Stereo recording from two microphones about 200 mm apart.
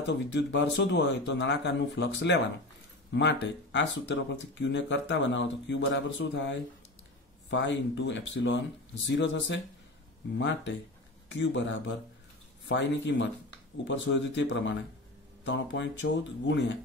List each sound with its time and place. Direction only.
0.0 s speech: 60° left (ahead or behind)